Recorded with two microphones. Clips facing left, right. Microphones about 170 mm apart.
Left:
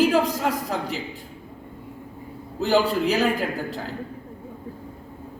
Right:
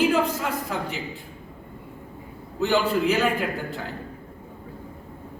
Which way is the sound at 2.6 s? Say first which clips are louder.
Left 1 dB; 40° left (ahead or behind).